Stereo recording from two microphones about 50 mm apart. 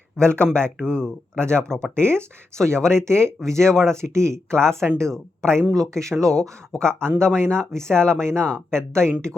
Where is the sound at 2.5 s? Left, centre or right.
Right.